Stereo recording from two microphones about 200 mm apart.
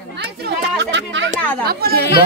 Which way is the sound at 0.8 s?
65° right (ahead or behind).